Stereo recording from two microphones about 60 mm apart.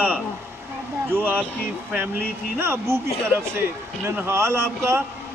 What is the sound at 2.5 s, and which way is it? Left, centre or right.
Speech, right.